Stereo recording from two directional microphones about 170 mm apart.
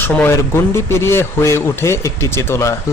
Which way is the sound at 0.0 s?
15° left (ahead or behind).